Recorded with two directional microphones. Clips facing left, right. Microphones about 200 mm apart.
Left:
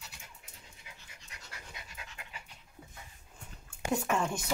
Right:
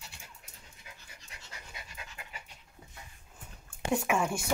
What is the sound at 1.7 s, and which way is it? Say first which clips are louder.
Pant: right 2 dB; 5° right (ahead or behind).